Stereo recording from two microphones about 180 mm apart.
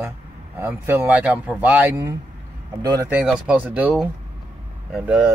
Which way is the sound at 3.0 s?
5° right (ahead or behind).